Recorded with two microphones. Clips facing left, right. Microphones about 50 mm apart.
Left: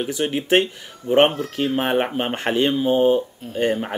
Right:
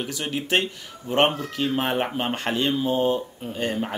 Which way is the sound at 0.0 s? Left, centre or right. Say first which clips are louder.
Left 6 dB; left.